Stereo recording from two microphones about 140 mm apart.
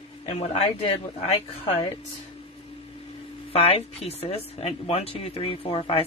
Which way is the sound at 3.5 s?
45° left (ahead or behind).